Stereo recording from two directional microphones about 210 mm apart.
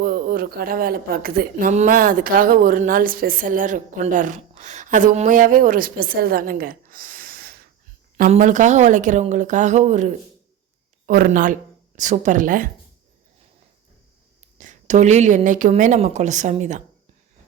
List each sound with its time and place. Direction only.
0.0 s speech: 45° right (ahead or behind)
14.6 s speech: 35° right (ahead or behind)